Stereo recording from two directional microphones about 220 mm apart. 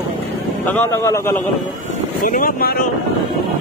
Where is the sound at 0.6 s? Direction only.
10° left (ahead or behind).